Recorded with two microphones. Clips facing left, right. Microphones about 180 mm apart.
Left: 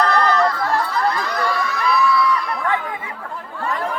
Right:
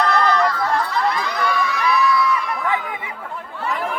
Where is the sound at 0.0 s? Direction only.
5° right (ahead or behind).